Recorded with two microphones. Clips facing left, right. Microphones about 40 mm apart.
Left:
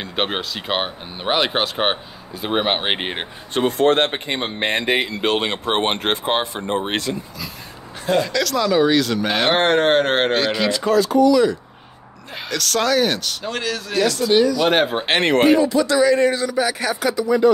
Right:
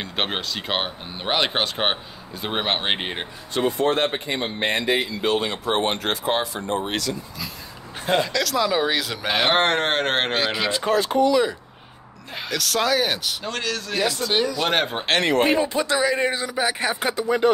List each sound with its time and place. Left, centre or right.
0.0 s speech: centre; by 3.3 s left
3.5 s speech: left
4.1 s speech: left
4.9 s speech: left
8.3 s speech: centre
10.7 s speech: right
12.4 s speech: centre
13.5 s speech: centre
13.9 s speech: centre
14.7 s speech: centre
15.4 s a man's voice: right
17.1 s speech: right